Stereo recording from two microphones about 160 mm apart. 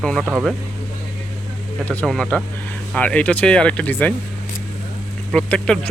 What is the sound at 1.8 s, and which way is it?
Speech, 5° left (ahead or behind).